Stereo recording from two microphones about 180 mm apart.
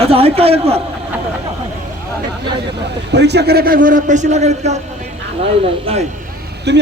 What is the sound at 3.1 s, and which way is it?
A man's voice, 70° right (ahead or behind).